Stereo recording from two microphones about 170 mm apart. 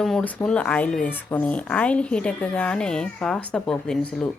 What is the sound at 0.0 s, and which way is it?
Speech, 5° left (ahead or behind).